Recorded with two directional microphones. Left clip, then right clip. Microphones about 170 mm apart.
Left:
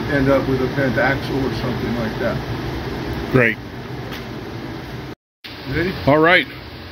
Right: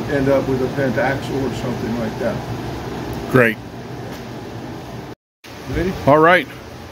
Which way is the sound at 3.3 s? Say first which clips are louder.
Right 2 dB; 20° right (ahead or behind).